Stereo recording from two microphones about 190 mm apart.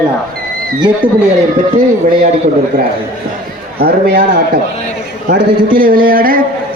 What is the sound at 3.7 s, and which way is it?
Speech, 55° right (ahead or behind).